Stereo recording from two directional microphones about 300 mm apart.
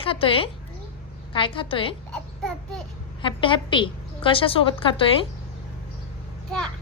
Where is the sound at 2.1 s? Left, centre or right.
Centre.